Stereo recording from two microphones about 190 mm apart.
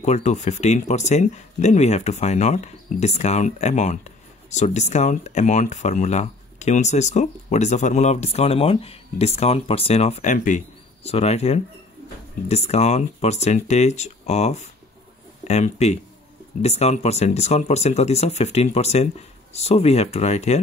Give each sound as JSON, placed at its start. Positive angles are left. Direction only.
{"t": 0.0, "sound": "speech", "side_deg": 35}